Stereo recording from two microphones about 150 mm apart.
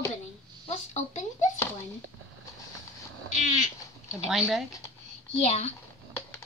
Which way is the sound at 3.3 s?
55° left (ahead or behind).